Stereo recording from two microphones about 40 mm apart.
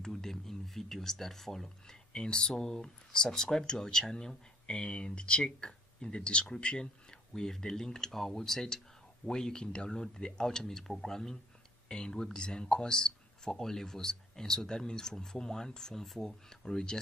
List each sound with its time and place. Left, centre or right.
0.0 s speech: centre